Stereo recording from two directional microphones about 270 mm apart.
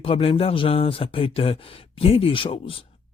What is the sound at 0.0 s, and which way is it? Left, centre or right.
Speech, left.